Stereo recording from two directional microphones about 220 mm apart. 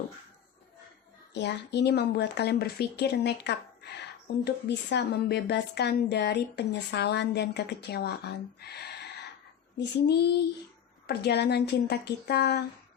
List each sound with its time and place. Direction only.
1.3 s speech: 50° left (ahead or behind)